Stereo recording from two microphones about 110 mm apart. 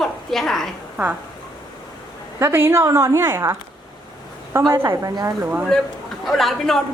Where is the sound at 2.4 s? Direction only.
20° right (ahead or behind).